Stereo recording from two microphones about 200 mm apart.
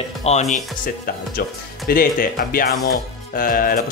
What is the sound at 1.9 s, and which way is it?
Speech, 45° left (ahead or behind).